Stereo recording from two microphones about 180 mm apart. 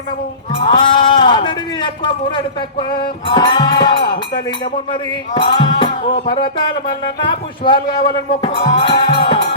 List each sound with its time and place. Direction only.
0.6 s a man's voice: 25° left (ahead or behind)
4.6 s music: 25° left (ahead or behind)